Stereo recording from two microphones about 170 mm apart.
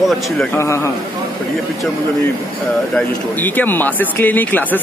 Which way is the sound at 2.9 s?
10° left (ahead or behind).